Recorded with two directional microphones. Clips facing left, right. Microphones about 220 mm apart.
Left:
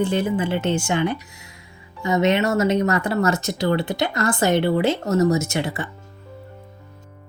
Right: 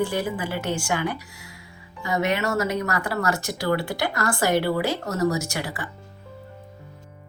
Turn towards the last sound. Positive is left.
turn(degrees=25)  # may be behind; listen again after turning